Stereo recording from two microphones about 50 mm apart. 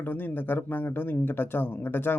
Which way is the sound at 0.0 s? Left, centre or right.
Left.